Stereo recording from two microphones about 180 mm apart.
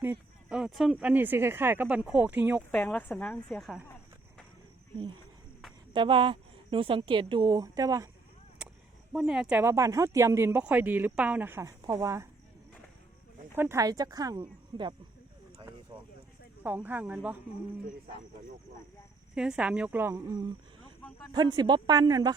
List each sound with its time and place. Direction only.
0.0 s speech: 10° right (ahead or behind)
2.7 s a woman's voice: 10° left (ahead or behind)
5.9 s a woman's voice: 25° right (ahead or behind)
8.6 s a sound: 5° right (ahead or behind)
9.1 s speech: 5° right (ahead or behind)
13.6 s a woman's voice: 15° right (ahead or behind)
16.6 s speech: 10° right (ahead or behind)
19.3 s a woman's voice: 5° right (ahead or behind); by 22.4 s 20° right (ahead or behind)